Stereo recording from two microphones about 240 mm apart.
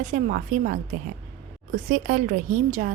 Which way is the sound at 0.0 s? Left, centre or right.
Right.